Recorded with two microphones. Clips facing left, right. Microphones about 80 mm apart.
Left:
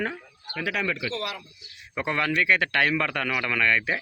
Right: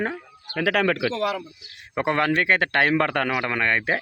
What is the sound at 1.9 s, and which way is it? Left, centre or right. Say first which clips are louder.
A man's voice: right 4 dB; right.